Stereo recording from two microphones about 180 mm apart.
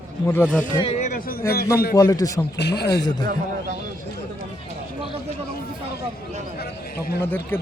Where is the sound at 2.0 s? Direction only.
20° left (ahead or behind).